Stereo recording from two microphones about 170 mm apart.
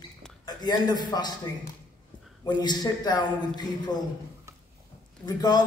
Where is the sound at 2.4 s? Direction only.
25° left (ahead or behind).